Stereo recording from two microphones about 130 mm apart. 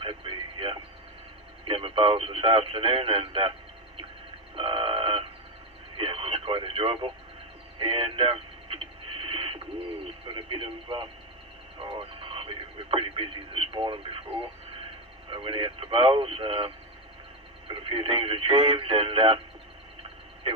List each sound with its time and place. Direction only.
0.0 s radio: 45° right (ahead or behind)
1.6 s speech: 40° right (ahead or behind)
4.5 s a sound: 45° right (ahead or behind)
6.0 s radio: 45° right (ahead or behind)
10.2 s speech: 40° right (ahead or behind)
11.9 s radio: 45° right (ahead or behind)
15.3 s speech: 40° right (ahead or behind)